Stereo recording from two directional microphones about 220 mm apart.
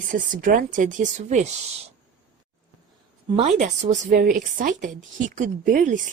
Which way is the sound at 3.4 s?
30° right (ahead or behind).